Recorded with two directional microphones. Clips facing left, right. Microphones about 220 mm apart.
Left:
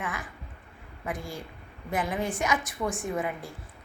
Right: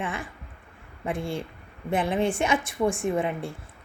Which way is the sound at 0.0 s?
30° right (ahead or behind).